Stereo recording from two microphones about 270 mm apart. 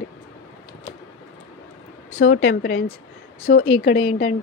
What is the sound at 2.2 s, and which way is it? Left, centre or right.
Speech, left.